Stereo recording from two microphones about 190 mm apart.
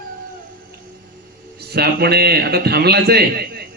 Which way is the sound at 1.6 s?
55° right (ahead or behind).